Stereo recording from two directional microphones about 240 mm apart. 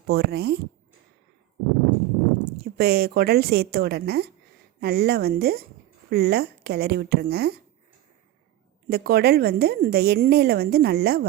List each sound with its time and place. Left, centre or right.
0.1 s a woman's voice: right
2.4 s a woman's voice: right
8.9 s a woman's voice: right